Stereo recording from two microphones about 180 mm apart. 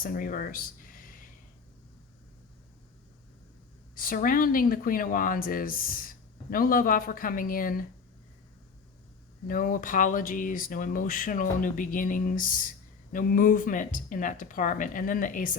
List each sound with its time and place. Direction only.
0.0 s speech: 50° left (ahead or behind)
3.9 s speech: 50° left (ahead or behind)
9.5 s speech: 50° left (ahead or behind)